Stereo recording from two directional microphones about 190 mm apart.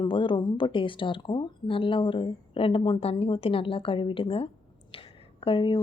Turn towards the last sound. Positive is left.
turn(degrees=25)  # may be behind; listen again after turning